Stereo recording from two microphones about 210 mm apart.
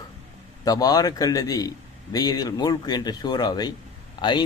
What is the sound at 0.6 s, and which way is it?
Speech, 20° left (ahead or behind).